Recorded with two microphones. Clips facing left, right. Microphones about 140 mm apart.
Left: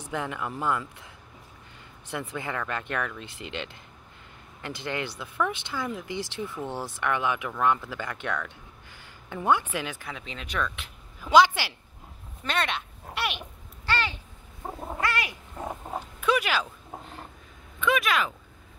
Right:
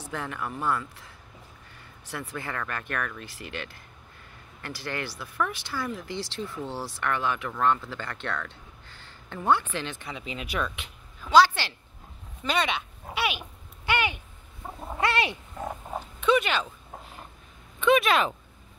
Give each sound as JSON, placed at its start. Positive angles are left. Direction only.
{"t": 0.0, "sound": "speech", "side_deg": 15}
{"t": 10.2, "sound": "speech", "side_deg": -10}
{"t": 11.1, "sound": "speech", "side_deg": 15}
{"t": 12.4, "sound": "speech", "side_deg": 0}
{"t": 13.8, "sound": "a sound", "side_deg": -15}
{"t": 15.0, "sound": "a sound", "side_deg": -25}
{"t": 16.2, "sound": "speech", "side_deg": 5}
{"t": 17.7, "sound": "speech", "side_deg": -25}